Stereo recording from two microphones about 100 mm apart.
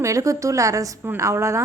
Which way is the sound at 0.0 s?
30° right (ahead or behind).